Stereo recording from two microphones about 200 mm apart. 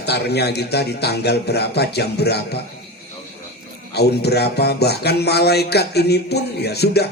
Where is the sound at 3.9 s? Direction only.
55° left (ahead or behind).